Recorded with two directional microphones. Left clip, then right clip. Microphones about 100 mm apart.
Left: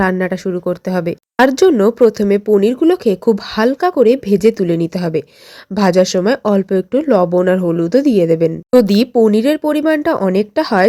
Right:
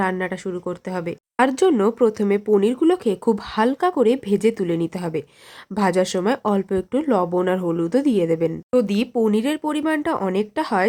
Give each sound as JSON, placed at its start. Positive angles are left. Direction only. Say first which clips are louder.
{"t": 0.0, "sound": "speech", "louder": "left 7 dB", "side_deg": 45}
{"t": 8.7, "sound": "speech", "louder": "left 10 dB", "side_deg": 65}
{"t": 9.1, "sound": "speech", "louder": "left 8 dB", "side_deg": 35}